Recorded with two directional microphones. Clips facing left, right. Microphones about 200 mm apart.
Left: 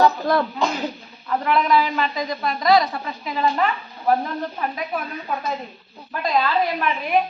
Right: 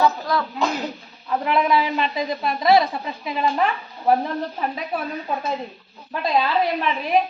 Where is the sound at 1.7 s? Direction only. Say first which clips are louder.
Left 1 dB; 25° right (ahead or behind).